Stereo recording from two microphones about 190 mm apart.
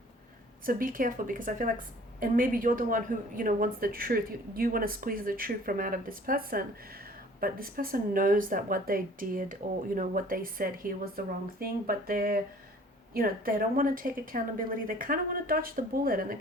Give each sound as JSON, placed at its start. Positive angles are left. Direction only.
{"t": 0.6, "sound": "speech", "side_deg": -45}